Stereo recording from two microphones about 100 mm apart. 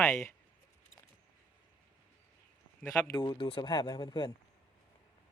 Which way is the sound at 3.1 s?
50° left (ahead or behind).